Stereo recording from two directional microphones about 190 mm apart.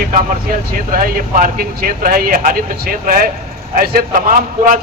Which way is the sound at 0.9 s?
50° right (ahead or behind).